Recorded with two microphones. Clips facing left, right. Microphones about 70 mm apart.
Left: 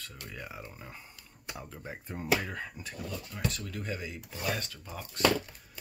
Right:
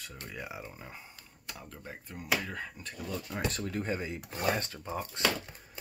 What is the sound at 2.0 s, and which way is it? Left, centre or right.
Speech, left.